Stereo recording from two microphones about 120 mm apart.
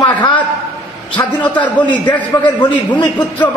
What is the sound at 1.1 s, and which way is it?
Speech, 10° left (ahead or behind).